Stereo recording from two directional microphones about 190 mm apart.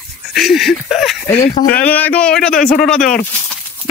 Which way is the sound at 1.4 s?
30° left (ahead or behind).